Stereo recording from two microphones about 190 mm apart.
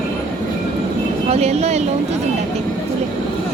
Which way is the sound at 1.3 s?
35° right (ahead or behind).